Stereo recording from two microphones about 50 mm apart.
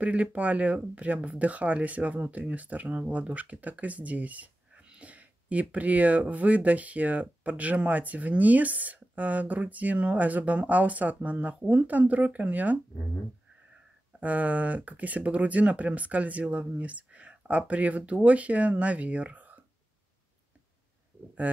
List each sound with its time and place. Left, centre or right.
0.0 s speech: right
14.2 s speech: right